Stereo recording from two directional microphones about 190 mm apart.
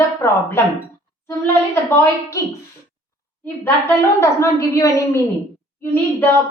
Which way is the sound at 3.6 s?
15° left (ahead or behind).